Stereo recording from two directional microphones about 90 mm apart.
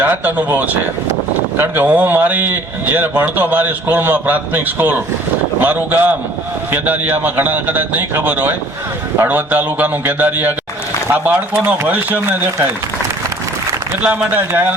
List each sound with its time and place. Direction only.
0.0 s a man's voice: 20° right (ahead or behind)
14.0 s a man's voice: 20° right (ahead or behind)